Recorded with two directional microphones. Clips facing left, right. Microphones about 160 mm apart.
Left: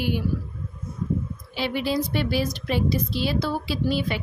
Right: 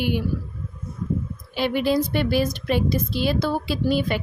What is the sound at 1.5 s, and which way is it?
A woman's voice, 50° right (ahead or behind).